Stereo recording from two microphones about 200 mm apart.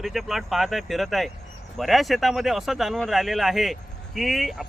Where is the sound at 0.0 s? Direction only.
Centre (ahead or behind).